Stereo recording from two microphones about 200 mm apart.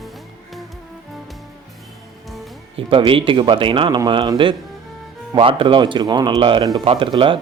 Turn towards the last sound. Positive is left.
turn(degrees=-25)  # may be behind; listen again after turning